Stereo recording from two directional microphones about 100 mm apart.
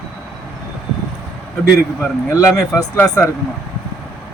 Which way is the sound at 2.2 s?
35° left (ahead or behind).